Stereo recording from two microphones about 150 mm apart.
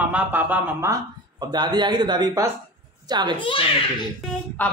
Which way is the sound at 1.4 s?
30° right (ahead or behind).